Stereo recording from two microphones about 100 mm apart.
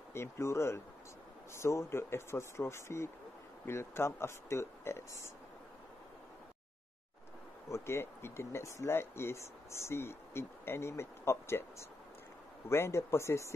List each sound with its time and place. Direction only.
0.1 s speech: 25° left (ahead or behind)
7.7 s speech: 25° left (ahead or behind)
12.6 s speech: 25° left (ahead or behind)